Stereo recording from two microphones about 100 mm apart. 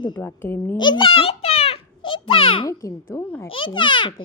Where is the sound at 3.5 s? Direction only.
55° left (ahead or behind).